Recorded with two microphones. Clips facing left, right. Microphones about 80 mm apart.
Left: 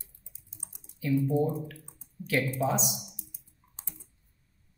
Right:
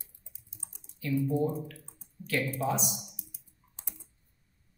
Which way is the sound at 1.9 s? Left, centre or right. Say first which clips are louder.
Left 3 dB; centre.